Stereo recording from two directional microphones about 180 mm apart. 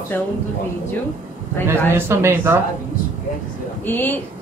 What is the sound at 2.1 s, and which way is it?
Speech, 15° right (ahead or behind).